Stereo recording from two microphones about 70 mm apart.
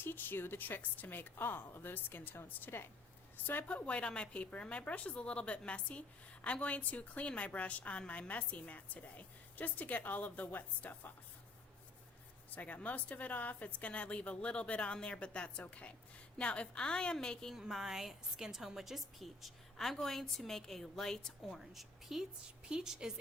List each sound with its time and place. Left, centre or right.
0.0 s a woman's voice: left
12.5 s a woman's voice: left
17.5 s a woman's voice: centre